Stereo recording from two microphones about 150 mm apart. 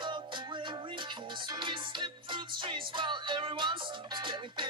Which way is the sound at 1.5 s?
30° right (ahead or behind).